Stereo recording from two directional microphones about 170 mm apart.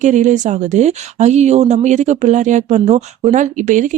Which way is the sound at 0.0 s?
45° right (ahead or behind).